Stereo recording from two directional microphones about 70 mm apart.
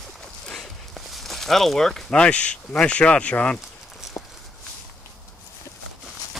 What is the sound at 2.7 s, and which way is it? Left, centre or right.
Speech, centre.